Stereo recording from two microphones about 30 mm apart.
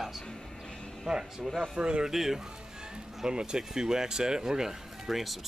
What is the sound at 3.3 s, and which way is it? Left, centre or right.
Speech, right.